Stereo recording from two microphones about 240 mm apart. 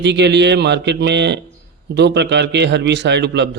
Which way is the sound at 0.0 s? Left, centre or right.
Right.